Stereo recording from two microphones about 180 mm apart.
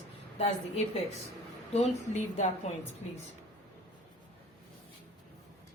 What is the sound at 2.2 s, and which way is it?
Speech, 40° left (ahead or behind).